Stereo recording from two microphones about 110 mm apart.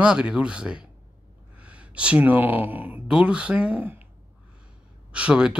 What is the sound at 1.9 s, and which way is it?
Speech, 10° right (ahead or behind).